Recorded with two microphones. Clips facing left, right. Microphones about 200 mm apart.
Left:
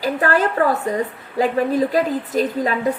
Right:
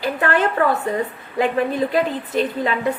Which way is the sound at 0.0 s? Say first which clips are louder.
Left 1 dB; 40° left (ahead or behind).